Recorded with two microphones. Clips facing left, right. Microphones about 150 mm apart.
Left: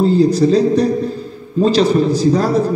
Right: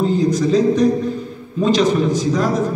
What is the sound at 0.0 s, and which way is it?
A man's voice, 35° left (ahead or behind).